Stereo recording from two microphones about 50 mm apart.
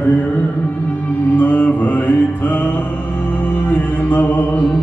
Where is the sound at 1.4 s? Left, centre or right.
Left.